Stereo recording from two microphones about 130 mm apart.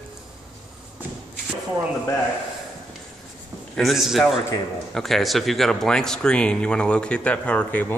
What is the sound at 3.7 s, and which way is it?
A man's voice, centre (ahead or behind).